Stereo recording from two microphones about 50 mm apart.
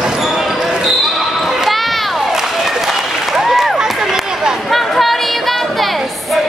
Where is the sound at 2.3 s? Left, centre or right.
Centre.